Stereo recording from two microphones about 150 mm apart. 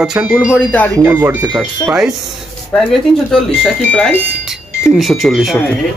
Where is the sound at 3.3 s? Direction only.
Centre (ahead or behind).